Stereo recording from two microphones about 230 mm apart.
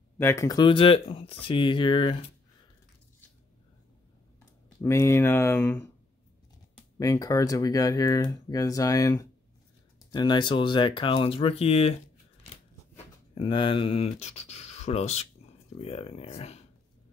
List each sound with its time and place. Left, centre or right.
0.2 s speech: centre
4.8 s speech: centre
7.0 s speech: centre
13.3 s speech: left